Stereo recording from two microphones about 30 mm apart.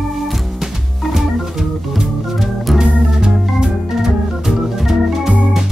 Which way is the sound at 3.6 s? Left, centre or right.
Centre.